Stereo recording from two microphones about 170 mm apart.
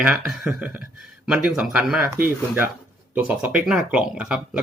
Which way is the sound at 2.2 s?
60° right (ahead or behind).